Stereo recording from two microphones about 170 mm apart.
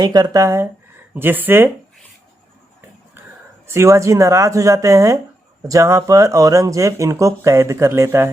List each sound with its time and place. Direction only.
0.0 s speech: 25° right (ahead or behind)
3.7 s speech: 15° right (ahead or behind)